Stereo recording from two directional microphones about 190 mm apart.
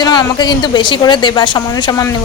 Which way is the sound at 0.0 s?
20° left (ahead or behind).